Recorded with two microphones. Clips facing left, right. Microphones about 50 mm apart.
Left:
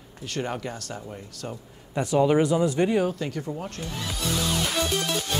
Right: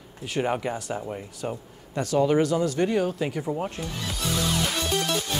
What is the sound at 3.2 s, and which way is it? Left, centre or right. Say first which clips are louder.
Speech: right 3 dB; centre.